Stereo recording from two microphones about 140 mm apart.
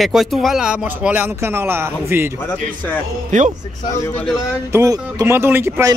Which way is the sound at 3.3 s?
60° right (ahead or behind).